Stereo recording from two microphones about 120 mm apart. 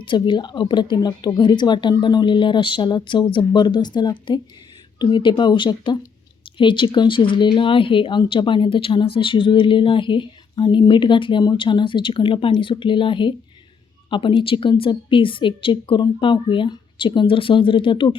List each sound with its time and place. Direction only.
0.0 s speech: 40° left (ahead or behind)